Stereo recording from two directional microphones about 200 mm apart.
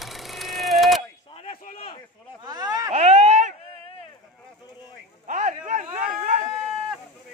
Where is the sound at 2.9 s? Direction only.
30° right (ahead or behind).